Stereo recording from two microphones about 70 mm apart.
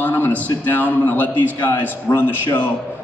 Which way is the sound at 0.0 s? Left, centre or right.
Left.